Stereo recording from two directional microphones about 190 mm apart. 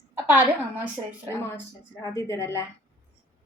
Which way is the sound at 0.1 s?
10° right (ahead or behind).